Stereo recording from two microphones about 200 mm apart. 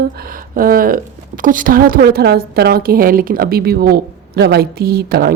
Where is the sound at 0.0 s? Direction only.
45° right (ahead or behind).